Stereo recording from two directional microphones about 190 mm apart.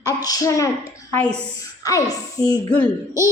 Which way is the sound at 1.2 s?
5° left (ahead or behind).